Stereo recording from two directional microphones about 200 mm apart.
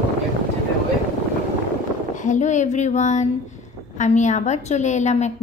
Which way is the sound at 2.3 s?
35° left (ahead or behind).